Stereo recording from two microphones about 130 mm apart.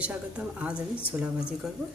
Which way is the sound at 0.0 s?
10° right (ahead or behind).